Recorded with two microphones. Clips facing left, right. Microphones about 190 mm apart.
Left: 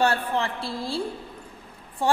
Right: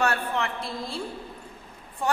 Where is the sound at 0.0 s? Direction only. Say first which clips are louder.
Left 3 dB; 30° left (ahead or behind).